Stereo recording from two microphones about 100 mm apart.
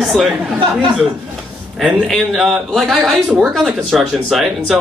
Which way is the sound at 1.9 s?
Centre (ahead or behind).